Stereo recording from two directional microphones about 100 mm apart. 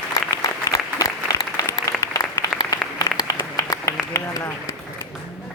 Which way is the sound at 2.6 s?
40° left (ahead or behind).